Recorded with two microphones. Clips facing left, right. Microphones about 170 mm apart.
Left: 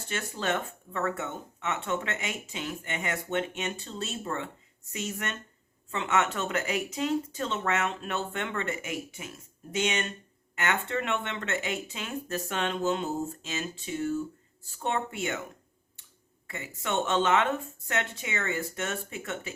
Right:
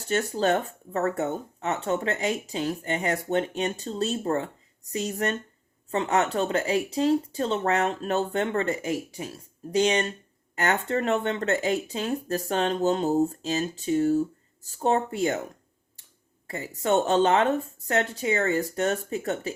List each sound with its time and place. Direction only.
0.1 s speech: 40° right (ahead or behind)
16.5 s speech: 35° right (ahead or behind)